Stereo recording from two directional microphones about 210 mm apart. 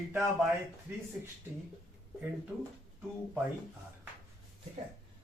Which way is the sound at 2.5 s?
5° right (ahead or behind).